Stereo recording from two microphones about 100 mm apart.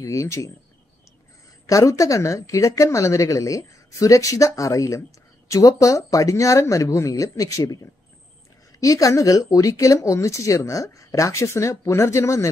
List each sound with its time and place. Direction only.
0.0 s speech: 30° left (ahead or behind)
1.7 s speech: 35° left (ahead or behind)